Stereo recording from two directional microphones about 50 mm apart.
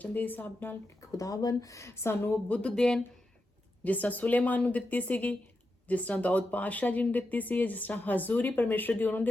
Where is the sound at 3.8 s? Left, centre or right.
Left.